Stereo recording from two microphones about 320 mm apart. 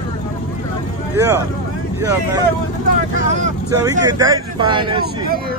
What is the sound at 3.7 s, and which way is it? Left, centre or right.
Speech, centre.